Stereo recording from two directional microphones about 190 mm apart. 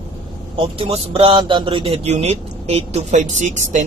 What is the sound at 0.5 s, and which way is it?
A man's voice, 30° right (ahead or behind).